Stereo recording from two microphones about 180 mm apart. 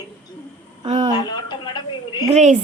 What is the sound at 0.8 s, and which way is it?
Speech, 25° right (ahead or behind).